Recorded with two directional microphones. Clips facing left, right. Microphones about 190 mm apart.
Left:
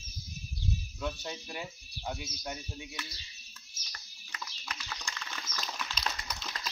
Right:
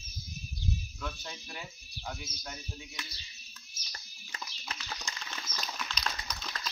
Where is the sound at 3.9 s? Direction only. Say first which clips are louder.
Right 1 dB; 30° right (ahead or behind).